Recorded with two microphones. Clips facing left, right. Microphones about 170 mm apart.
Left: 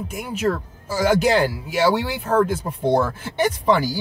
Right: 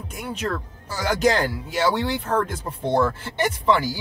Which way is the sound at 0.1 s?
5° left (ahead or behind).